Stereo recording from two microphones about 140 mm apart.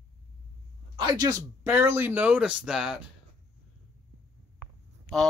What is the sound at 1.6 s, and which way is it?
Speech, 15° right (ahead or behind).